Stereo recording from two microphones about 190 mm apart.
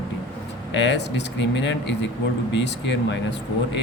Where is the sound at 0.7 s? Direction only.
65° left (ahead or behind).